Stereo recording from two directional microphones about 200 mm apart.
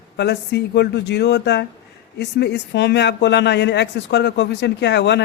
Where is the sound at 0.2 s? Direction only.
55° left (ahead or behind).